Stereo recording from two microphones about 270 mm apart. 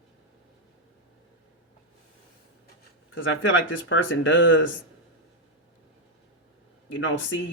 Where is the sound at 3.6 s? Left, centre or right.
Left.